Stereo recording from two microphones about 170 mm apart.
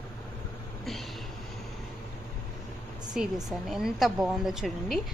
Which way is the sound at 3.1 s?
5° right (ahead or behind).